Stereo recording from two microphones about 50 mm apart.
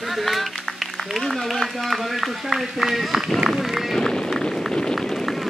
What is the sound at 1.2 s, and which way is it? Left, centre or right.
A man's voice, centre.